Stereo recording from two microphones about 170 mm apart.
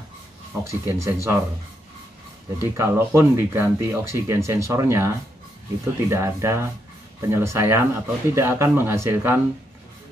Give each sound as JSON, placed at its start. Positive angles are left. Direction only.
{"t": 0.7, "sound": "speech", "side_deg": -15}
{"t": 2.6, "sound": "speech", "side_deg": -15}